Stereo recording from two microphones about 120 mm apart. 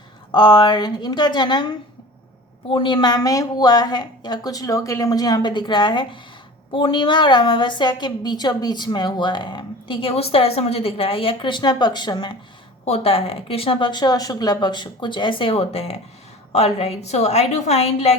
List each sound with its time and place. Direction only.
0.3 s a woman's voice: 40° left (ahead or behind)
2.6 s a woman's voice: 45° left (ahead or behind)
12.8 s a woman's voice: 55° left (ahead or behind)